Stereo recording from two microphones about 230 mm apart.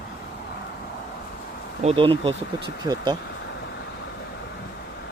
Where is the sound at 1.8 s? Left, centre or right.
Right.